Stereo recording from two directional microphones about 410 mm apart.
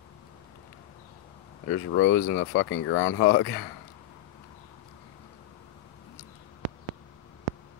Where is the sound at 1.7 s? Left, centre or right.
Left.